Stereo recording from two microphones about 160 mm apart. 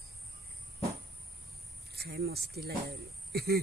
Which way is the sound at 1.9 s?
80° right.